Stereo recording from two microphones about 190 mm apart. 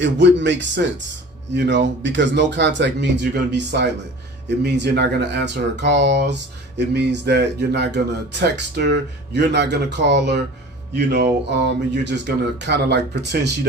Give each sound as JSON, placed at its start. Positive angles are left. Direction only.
{"t": 0.0, "sound": "speech", "side_deg": -70}